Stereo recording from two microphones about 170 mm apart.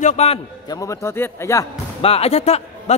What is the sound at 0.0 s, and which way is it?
Speech, 40° left (ahead or behind).